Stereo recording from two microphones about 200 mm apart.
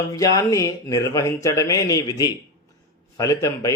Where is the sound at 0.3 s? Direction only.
15° left (ahead or behind).